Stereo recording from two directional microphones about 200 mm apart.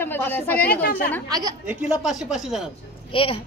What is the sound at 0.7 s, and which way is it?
Speech, 50° left (ahead or behind).